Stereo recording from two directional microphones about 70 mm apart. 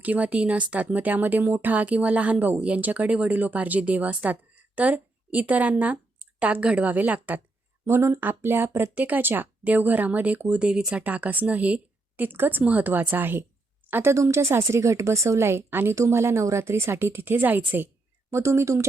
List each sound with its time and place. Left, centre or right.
0.0 s speech: right
7.9 s a woman's voice: right
14.2 s a woman's voice: right
18.3 s a woman's voice: right